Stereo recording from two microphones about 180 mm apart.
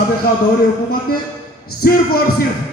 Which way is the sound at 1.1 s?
55° left (ahead or behind).